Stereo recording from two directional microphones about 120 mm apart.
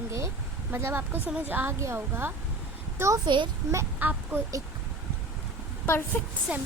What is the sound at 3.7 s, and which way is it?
Speech, 25° right (ahead or behind).